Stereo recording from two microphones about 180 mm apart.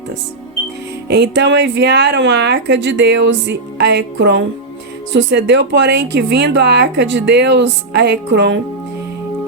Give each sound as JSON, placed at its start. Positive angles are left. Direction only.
{"t": 1.0, "sound": "a woman's voice", "side_deg": -70}